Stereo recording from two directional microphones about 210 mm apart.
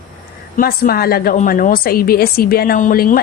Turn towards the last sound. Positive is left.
turn(degrees=45)  # may be behind; listen again after turning